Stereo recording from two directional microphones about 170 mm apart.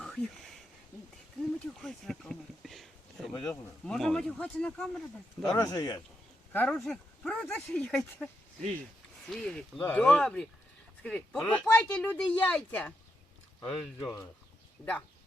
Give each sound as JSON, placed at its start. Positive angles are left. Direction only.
{"t": 1.4, "sound": "speech", "side_deg": 5}
{"t": 5.5, "sound": "speech", "side_deg": 20}
{"t": 6.5, "sound": "speech", "side_deg": 10}
{"t": 9.3, "sound": "speech", "side_deg": 5}